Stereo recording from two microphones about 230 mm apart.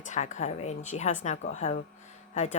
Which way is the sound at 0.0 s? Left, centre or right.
Left.